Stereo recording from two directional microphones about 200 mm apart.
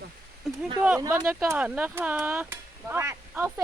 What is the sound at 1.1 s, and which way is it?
Speech, 10° right (ahead or behind).